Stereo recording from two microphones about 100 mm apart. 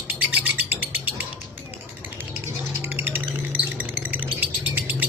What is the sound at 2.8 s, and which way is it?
Music, 20° right (ahead or behind).